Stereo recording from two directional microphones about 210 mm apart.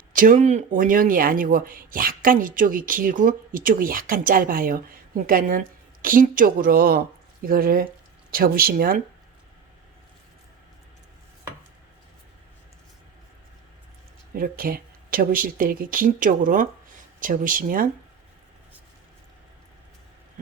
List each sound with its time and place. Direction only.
0.1 s speech: 40° right (ahead or behind)
14.3 s speech: 45° right (ahead or behind)